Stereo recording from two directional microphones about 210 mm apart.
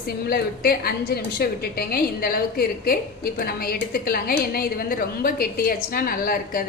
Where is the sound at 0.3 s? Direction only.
50° left (ahead or behind).